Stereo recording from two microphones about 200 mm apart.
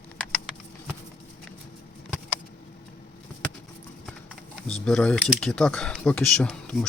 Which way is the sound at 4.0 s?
5° left (ahead or behind).